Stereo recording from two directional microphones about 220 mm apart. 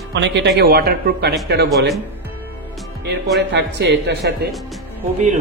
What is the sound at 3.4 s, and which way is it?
Speech, 50° right (ahead or behind).